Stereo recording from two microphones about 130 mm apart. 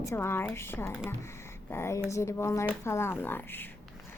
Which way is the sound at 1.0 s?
20° left (ahead or behind).